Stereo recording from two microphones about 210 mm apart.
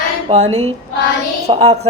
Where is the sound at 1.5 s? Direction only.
30° right (ahead or behind).